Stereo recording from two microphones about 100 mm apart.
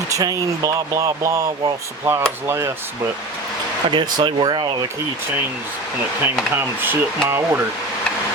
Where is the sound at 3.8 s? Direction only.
55° right (ahead or behind).